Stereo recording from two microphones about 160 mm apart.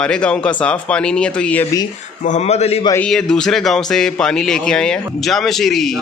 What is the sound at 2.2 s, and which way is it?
Speech, 45° left (ahead or behind).